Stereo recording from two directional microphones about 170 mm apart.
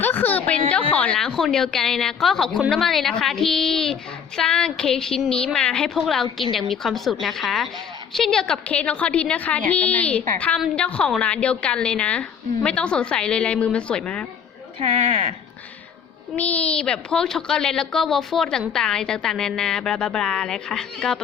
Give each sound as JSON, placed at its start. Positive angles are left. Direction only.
{"t": 0.0, "sound": "a sound", "side_deg": 10}
{"t": 0.9, "sound": "a woman's voice", "side_deg": 5}
{"t": 14.8, "sound": "speech", "side_deg": -35}
{"t": 16.3, "sound": "a woman's voice", "side_deg": 10}